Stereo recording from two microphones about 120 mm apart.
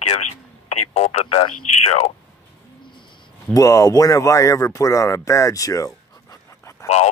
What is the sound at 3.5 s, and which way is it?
Speech, 30° left (ahead or behind).